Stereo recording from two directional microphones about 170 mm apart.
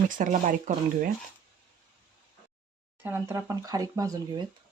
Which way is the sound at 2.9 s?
10° right (ahead or behind).